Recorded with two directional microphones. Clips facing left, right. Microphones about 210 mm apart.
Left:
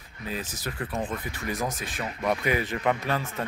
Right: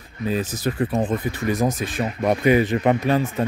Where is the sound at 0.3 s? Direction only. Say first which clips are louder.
Right 10 dB; 25° right (ahead or behind).